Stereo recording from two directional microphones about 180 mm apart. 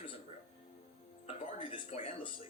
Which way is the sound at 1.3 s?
30° left (ahead or behind).